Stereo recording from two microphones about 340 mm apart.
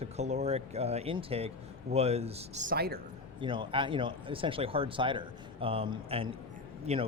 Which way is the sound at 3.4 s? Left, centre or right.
Centre.